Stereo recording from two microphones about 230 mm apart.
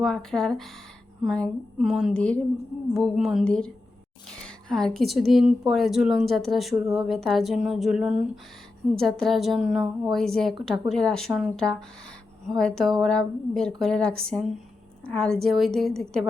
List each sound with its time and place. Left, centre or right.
0.0 s a woman's voice: centre